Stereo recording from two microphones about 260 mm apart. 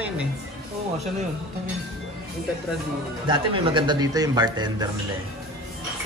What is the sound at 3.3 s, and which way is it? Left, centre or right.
Speech, centre.